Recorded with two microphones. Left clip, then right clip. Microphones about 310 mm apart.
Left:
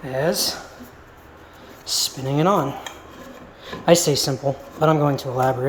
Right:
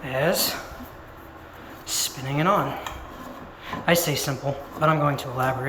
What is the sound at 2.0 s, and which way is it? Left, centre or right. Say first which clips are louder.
Speech: left 3 dB; left.